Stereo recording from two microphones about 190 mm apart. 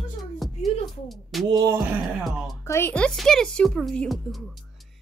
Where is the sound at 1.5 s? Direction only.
20° right (ahead or behind).